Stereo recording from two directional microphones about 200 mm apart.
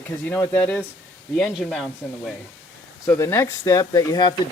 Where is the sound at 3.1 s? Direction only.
10° left (ahead or behind).